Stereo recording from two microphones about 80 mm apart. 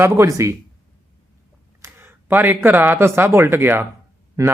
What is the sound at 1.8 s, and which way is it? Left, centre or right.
Speech, right.